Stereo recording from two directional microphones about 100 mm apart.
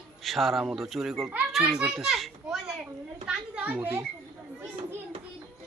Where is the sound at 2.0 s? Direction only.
Centre (ahead or behind).